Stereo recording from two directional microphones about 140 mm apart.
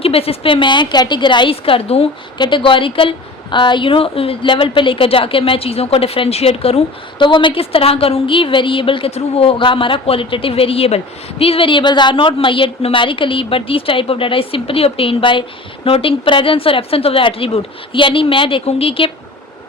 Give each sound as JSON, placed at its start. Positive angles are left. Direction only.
{"t": 0.0, "sound": "a woman's voice", "side_deg": 45}